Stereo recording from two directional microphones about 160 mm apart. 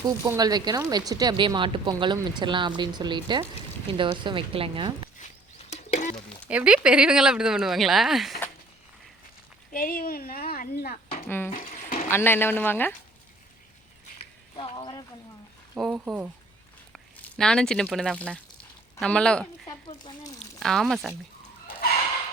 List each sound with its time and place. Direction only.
0.0 s speech: 25° right (ahead or behind)
5.2 s a sound: 50° left (ahead or behind)
5.7 s bird: 45° left (ahead or behind)
6.5 s speech: 5° right (ahead or behind)
9.7 s a woman's voice: 60° left (ahead or behind)
10.9 s a sound: 45° left (ahead or behind)
11.3 s speech: 15° left (ahead or behind)
11.5 s a sound: 55° left (ahead or behind)
12.1 s speech: 15° left (ahead or behind)
14.5 s a sound: 35° left (ahead or behind)
15.8 s speech: centre (ahead or behind)
17.2 s speech: 5° left (ahead or behind)
20.6 s speech: centre (ahead or behind)